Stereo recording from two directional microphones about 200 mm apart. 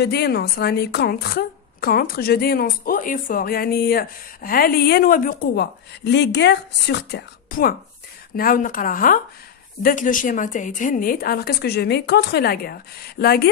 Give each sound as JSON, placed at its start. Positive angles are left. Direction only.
{"t": 0.0, "sound": "a woman's voice", "side_deg": 55}